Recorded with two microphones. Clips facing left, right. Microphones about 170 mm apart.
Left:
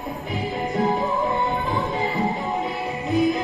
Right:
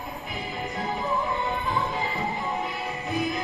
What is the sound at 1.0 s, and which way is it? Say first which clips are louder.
Music: left 5 dB; 20° left (ahead or behind).